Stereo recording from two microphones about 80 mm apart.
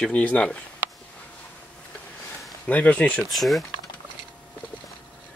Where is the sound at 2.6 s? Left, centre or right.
Centre.